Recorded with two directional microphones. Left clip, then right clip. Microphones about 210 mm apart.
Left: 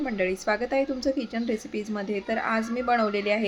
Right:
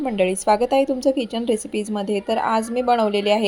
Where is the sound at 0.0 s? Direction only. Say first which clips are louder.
Right 7 dB; 25° right (ahead or behind).